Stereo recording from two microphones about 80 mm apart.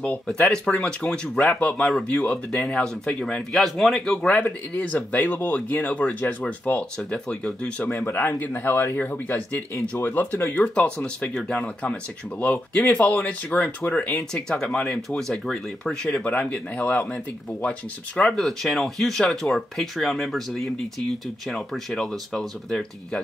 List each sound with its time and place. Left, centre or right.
0.7 s speech: centre
4.3 s speech: left
7.9 s speech: left
10.6 s speech: centre